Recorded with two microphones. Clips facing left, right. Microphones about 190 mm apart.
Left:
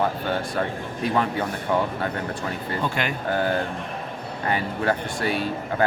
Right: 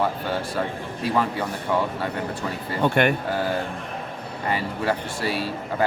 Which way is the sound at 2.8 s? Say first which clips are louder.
Right 9 dB; 55° right (ahead or behind).